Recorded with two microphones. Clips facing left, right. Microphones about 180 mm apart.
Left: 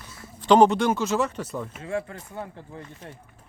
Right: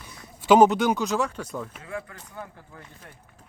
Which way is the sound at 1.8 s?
30° left (ahead or behind).